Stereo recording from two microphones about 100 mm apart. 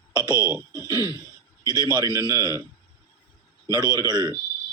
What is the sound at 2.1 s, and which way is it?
Speech, 35° right (ahead or behind).